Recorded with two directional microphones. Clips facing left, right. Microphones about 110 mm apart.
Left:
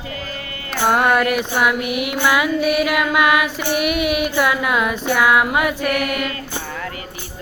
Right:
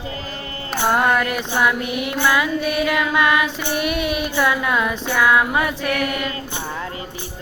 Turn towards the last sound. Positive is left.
turn(degrees=-25)  # may be behind; listen again after turning